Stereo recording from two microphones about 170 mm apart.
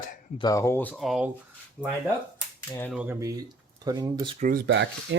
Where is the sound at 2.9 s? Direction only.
10° right (ahead or behind).